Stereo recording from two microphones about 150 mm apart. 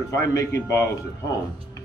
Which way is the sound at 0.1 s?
20° left (ahead or behind).